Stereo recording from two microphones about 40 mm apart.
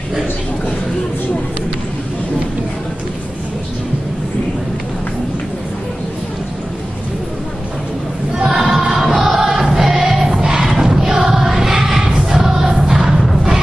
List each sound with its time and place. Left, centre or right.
8.5 s choir: centre
13.3 s music: centre